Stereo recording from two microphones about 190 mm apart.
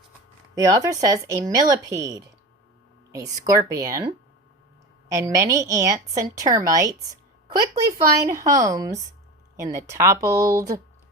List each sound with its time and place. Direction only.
0.5 s a woman's voice: 20° right (ahead or behind)
5.1 s a woman's voice: 15° right (ahead or behind)